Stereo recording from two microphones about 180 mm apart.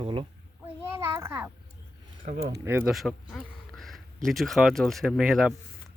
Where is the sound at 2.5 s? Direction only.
10° right (ahead or behind).